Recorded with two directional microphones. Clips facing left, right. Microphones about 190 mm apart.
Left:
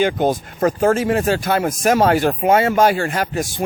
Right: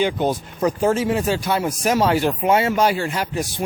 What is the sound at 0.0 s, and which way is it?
Speech, 50° left (ahead or behind).